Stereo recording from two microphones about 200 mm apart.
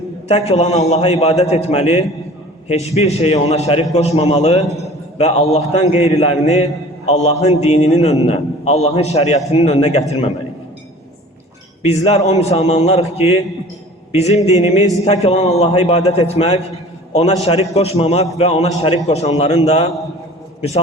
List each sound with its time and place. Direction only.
0.3 s a man's voice: 30° left (ahead or behind)
11.8 s a man's voice: 30° left (ahead or behind)